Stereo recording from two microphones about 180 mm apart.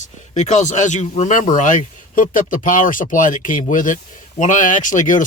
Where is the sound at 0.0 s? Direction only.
40° left (ahead or behind).